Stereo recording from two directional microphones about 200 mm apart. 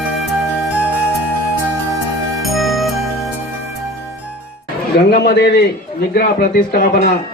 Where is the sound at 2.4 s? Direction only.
Centre (ahead or behind).